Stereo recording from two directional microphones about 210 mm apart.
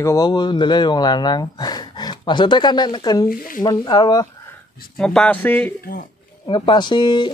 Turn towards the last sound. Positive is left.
turn(degrees=20)  # may be behind; listen again after turning